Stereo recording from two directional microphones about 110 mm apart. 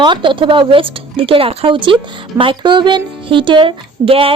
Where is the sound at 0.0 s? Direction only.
45° right (ahead or behind).